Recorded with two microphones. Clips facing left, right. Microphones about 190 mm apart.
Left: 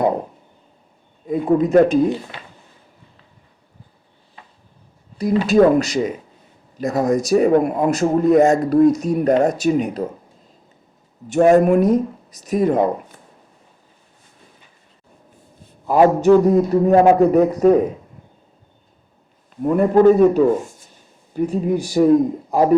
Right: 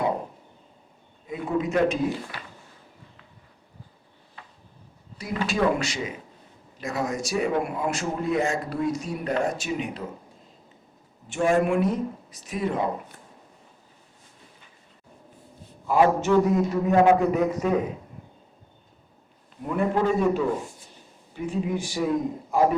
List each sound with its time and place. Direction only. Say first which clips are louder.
1.5 s a man's voice: left 9 dB; 40° left (ahead or behind)
2.0 s speech: left 7 dB; 20° left (ahead or behind)
5.1 s a man's voice: left 13 dB; 40° left (ahead or behind)
11.4 s a man's voice: left 8 dB; 40° left (ahead or behind)
15.9 s a man's voice: left 8 dB; 40° left (ahead or behind)
19.6 s a man's voice: left 11 dB; 45° left (ahead or behind)